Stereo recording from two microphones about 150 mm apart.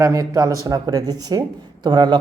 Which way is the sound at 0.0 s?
20° right (ahead or behind).